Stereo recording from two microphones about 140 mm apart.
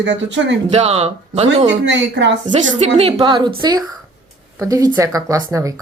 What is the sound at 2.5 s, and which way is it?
Speech, 55° right (ahead or behind).